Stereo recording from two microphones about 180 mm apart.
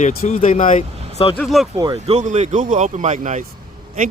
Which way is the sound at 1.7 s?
25° right (ahead or behind).